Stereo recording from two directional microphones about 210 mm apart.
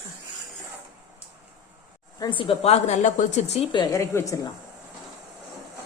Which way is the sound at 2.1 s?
20° left (ahead or behind).